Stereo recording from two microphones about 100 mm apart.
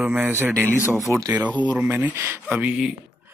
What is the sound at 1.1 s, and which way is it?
Speech, 30° left (ahead or behind).